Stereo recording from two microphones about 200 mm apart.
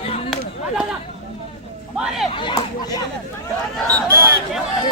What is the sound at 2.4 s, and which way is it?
Speech, 20° left (ahead or behind).